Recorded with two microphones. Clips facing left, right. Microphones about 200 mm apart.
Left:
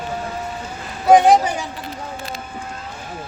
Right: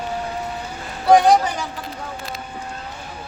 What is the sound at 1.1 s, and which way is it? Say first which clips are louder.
Speech: left 2 dB; 20° left (ahead or behind).